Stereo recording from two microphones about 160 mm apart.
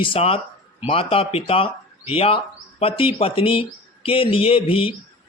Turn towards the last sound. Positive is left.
turn(degrees=35)  # may be behind; listen again after turning